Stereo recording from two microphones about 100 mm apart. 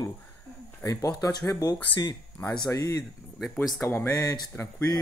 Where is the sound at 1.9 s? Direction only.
50° left (ahead or behind).